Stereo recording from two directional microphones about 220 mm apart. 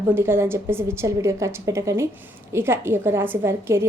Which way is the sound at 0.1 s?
10° right (ahead or behind).